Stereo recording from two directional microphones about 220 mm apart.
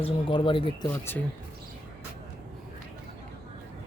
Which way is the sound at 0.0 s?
25° left (ahead or behind).